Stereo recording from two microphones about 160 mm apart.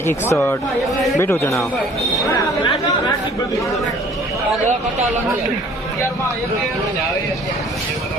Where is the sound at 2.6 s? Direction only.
30° left (ahead or behind).